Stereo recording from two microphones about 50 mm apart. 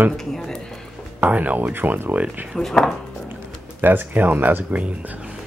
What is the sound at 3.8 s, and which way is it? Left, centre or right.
Speech, right.